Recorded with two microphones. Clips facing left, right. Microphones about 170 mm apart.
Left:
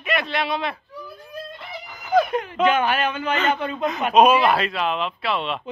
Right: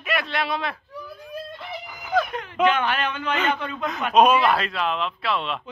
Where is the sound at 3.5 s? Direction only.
25° left (ahead or behind).